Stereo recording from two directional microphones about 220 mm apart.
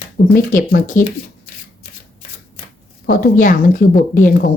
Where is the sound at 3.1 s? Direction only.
40° left (ahead or behind).